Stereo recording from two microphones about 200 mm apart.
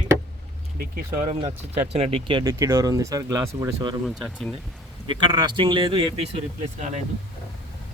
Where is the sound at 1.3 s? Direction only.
30° right (ahead or behind).